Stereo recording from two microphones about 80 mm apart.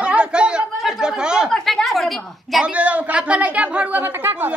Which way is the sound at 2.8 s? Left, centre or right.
Centre.